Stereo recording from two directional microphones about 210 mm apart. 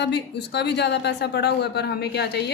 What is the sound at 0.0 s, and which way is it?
A woman's voice, 55° left (ahead or behind).